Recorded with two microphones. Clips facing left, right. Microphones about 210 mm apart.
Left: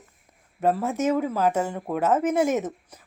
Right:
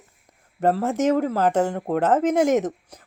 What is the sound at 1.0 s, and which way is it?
Speech, 80° right.